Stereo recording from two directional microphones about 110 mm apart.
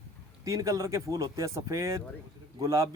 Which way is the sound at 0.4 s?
30° right (ahead or behind).